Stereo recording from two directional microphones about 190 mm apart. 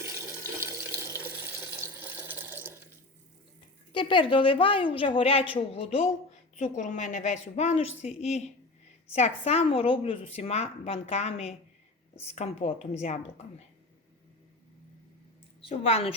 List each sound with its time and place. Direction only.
0.0 s water tap: 15° right (ahead or behind)
1.8 s a sound: 10° right (ahead or behind)
3.9 s a woman's voice: 25° left (ahead or behind)
15.6 s a woman's voice: 30° left (ahead or behind)